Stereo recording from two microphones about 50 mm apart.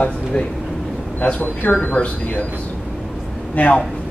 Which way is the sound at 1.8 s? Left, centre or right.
Left.